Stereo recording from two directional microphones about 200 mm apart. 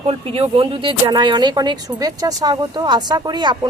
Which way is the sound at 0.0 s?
30° right (ahead or behind).